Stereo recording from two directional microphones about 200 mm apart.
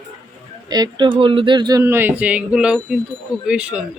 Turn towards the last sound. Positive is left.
turn(degrees=-5)  # may be behind; listen again after turning